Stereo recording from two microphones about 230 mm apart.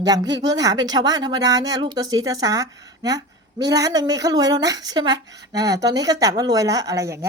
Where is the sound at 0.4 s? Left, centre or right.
Centre.